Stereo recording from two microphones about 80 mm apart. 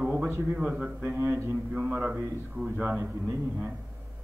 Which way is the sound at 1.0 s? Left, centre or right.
Right.